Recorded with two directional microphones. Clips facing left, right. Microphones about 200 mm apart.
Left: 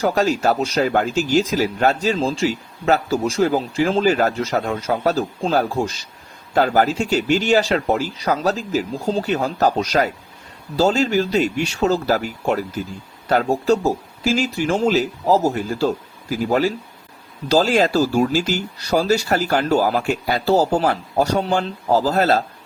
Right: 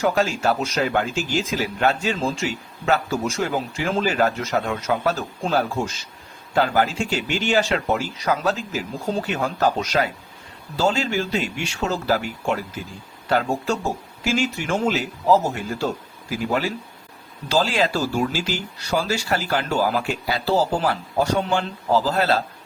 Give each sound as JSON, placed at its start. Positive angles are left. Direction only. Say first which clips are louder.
{"t": 0.0, "sound": "speech", "louder": "left 3 dB", "side_deg": 40}